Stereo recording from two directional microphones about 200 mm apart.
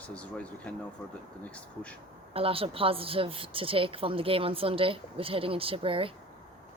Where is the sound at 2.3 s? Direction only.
30° right (ahead or behind).